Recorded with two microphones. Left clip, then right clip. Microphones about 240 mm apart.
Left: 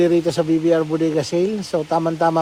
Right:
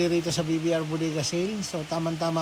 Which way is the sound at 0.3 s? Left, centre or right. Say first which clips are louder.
Left 10 dB; left.